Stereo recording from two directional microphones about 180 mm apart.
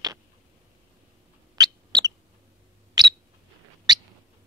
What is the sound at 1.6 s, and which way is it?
Owl, 20° right (ahead or behind).